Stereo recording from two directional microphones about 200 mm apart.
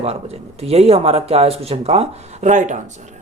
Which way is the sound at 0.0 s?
30° right (ahead or behind).